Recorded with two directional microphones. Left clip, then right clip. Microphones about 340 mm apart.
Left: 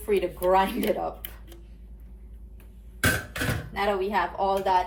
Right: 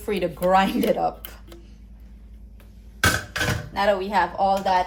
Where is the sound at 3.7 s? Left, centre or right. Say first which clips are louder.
Right 5 dB; right.